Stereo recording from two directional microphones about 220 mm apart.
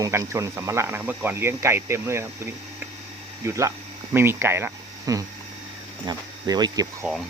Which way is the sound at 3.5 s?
15° right (ahead or behind).